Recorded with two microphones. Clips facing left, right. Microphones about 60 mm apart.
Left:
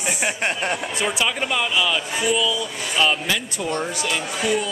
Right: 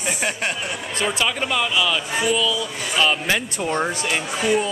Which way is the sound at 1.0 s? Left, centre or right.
Centre.